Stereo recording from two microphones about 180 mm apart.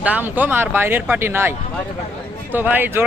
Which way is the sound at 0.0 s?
10° right (ahead or behind).